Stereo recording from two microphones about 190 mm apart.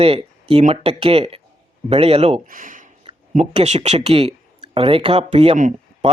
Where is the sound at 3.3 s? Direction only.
35° right (ahead or behind).